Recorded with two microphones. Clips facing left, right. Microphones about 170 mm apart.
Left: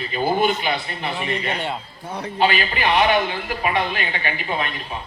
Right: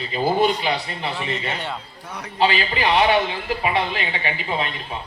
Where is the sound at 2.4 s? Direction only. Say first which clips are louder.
Even; 30° right (ahead or behind).